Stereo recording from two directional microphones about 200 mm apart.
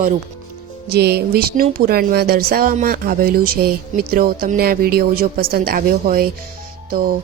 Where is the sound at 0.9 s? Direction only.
55° right (ahead or behind).